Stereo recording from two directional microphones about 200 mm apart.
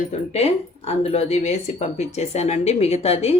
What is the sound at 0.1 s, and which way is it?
A woman's voice, 30° left (ahead or behind).